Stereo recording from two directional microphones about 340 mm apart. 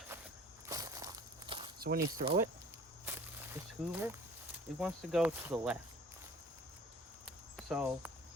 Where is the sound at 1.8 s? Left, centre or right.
Right.